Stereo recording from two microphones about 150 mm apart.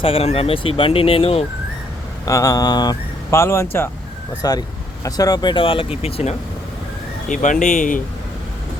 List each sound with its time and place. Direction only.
0.0 s speech: 40° left (ahead or behind)
2.2 s speech: 25° left (ahead or behind); by 6.3 s 40° left (ahead or behind)
7.3 s speech: 55° left (ahead or behind)